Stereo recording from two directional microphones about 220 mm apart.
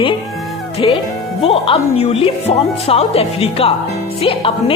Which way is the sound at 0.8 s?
20° left (ahead or behind).